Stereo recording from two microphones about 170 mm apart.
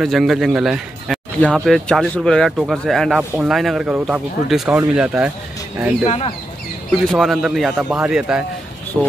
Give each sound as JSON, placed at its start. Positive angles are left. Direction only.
{"t": 0.0, "sound": "speech", "side_deg": 0}
{"t": 6.0, "sound": "speech", "side_deg": 35}
{"t": 6.9, "sound": "speech", "side_deg": 0}